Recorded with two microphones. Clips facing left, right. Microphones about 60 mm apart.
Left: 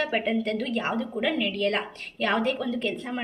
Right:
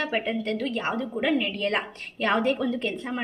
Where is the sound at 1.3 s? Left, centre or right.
Centre.